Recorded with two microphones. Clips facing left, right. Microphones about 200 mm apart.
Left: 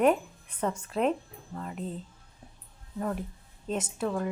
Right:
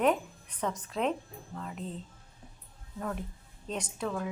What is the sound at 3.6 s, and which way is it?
Speech, 5° left (ahead or behind).